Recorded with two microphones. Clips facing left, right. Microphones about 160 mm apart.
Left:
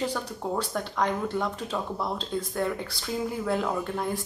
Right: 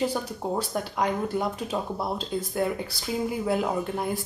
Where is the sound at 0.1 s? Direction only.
10° right (ahead or behind).